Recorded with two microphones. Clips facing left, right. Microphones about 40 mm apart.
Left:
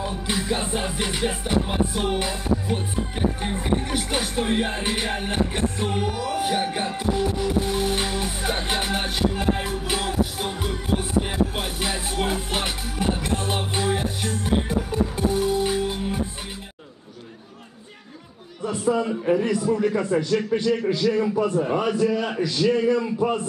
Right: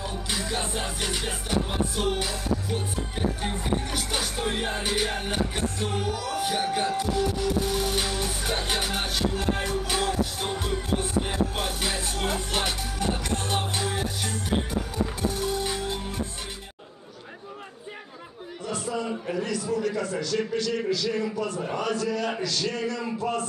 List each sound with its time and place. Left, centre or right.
0.0 s music: centre
18.7 s a man's voice: left